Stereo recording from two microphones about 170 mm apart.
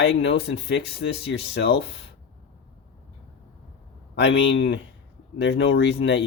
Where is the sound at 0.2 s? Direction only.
90° left.